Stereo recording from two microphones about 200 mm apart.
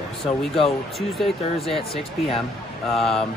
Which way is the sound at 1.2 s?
Centre (ahead or behind).